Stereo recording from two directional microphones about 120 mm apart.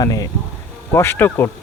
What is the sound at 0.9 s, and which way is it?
Speech, 20° left (ahead or behind).